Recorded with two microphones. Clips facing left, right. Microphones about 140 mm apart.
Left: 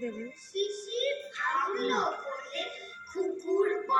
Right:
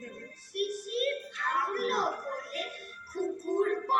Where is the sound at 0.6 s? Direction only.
30° left (ahead or behind).